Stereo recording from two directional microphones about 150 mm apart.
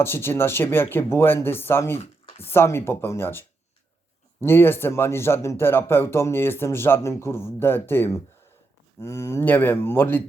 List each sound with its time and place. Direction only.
0.0 s speech: 15° left (ahead or behind)